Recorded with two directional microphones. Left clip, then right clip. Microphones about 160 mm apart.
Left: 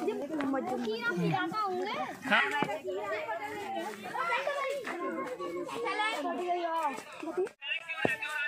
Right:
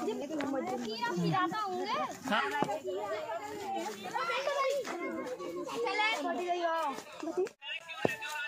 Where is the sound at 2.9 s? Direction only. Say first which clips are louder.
Left 1 dB; 20° right (ahead or behind).